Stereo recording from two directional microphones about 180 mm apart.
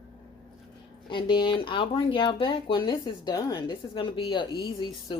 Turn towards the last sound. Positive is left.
turn(degrees=25)  # may be behind; listen again after turning